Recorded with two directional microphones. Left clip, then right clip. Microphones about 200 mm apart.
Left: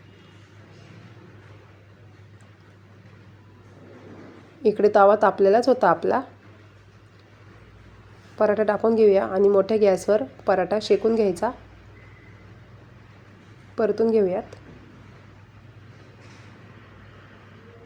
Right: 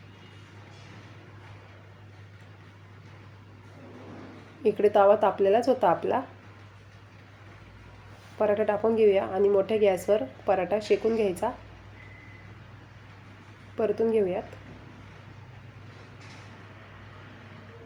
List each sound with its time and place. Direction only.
4.6 s a woman's voice: 25° left (ahead or behind)
8.4 s a woman's voice: 25° left (ahead or behind)
13.7 s a woman's voice: 25° left (ahead or behind)